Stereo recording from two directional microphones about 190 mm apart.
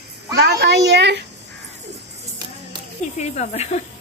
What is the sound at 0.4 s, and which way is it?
Speech, 65° right (ahead or behind).